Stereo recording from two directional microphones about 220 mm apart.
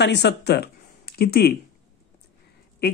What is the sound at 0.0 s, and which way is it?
Speech, 50° left (ahead or behind).